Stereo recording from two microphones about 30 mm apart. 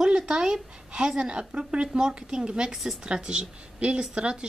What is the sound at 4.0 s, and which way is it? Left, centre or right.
Speech, right.